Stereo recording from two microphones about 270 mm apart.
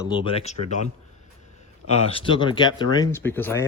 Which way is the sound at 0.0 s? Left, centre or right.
Centre.